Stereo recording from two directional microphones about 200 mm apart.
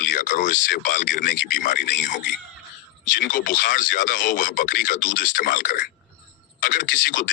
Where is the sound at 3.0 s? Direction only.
65° left (ahead or behind).